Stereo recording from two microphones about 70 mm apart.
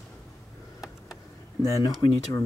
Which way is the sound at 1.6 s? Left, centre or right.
Left.